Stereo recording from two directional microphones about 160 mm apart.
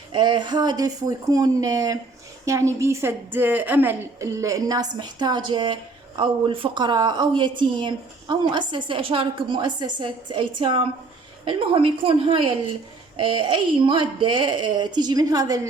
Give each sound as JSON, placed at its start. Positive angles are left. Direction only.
{"t": 0.1, "sound": "a woman's voice", "side_deg": -30}